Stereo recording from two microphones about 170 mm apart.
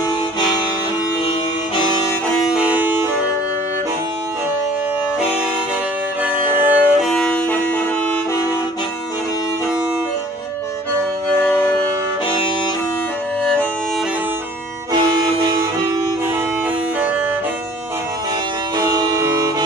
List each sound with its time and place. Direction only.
1.8 s music: 25° left (ahead or behind)
2.4 s music: 5° right (ahead or behind)
6.2 s music: 10° right (ahead or behind); by 7.5 s 5° left (ahead or behind)
11.4 s civil defense siren: 15° left (ahead or behind)
13.4 s music: 10° left (ahead or behind)
18.8 s music: 20° right (ahead or behind)